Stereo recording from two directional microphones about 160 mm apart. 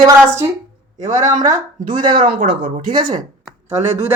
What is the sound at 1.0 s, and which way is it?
Speech, 50° right (ahead or behind).